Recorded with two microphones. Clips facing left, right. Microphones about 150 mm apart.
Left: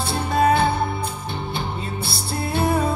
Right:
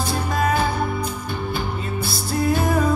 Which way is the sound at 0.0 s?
30° left (ahead or behind).